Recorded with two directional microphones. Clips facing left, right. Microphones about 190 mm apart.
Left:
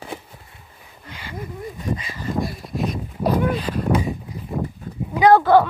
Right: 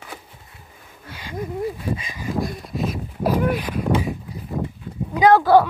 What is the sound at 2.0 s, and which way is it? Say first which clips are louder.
Speech: even; 15° right (ahead or behind).